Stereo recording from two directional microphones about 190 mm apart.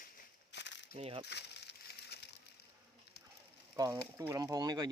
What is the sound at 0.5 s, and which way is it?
Coin, 65° left (ahead or behind).